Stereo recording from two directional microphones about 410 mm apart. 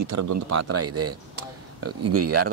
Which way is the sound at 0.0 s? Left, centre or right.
Right.